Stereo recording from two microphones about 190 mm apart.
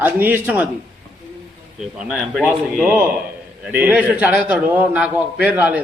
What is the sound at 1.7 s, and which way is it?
A man's voice, 5° right (ahead or behind).